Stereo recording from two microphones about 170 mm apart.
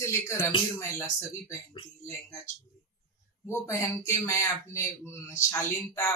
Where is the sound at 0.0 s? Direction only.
15° left (ahead or behind).